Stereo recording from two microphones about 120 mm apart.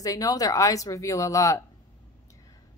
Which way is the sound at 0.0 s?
30° left (ahead or behind).